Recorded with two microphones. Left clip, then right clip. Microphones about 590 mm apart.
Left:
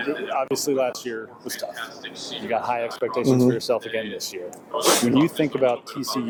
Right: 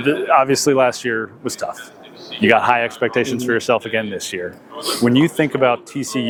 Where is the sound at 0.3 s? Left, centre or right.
Right.